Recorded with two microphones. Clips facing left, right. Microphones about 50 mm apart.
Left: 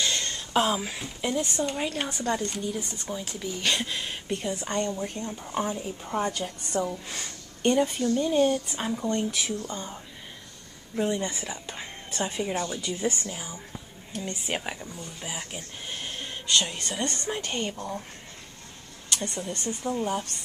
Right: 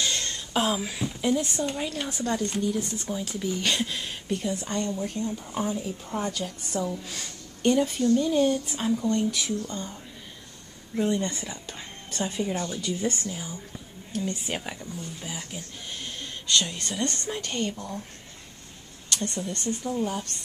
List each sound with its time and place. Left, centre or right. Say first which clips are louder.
0.0 s a sound: left 1 dB; centre
1.0 s speech: right 6 dB; centre
11.0 s speech: right 1 dB; centre
19.0 s speech: right 1 dB; centre